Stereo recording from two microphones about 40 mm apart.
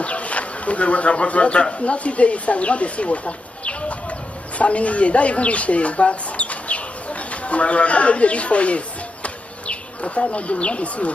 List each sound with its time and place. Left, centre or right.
0.0 s speech: left